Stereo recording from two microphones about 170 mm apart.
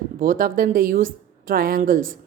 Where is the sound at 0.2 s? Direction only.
55° right (ahead or behind).